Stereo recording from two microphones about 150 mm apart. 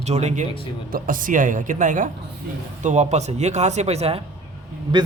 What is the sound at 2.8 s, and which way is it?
A man's voice, 50° right (ahead or behind).